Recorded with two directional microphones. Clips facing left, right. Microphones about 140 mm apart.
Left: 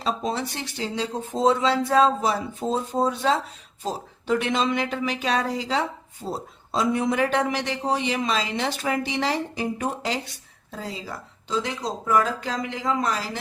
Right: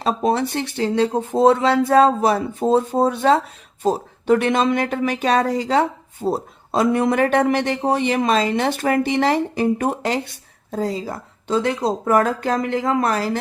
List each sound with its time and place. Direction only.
0.0 s speech: 55° right (ahead or behind)
10.7 s speech: 45° right (ahead or behind)